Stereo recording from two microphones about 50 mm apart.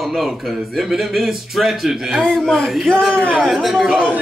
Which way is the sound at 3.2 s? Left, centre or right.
Right.